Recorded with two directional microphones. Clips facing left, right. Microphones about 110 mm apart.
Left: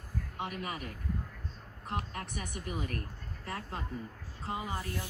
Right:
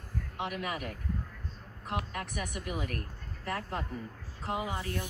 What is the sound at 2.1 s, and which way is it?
Speech, 65° right (ahead or behind).